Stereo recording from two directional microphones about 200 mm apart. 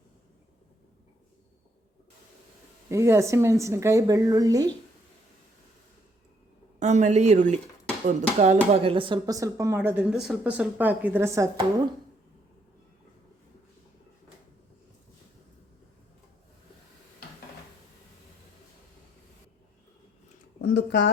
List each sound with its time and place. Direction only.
2.9 s a woman's voice: 15° right (ahead or behind)
6.7 s a woman's voice: 35° right (ahead or behind); by 11.4 s 15° right (ahead or behind)
20.6 s a sound: 60° left (ahead or behind)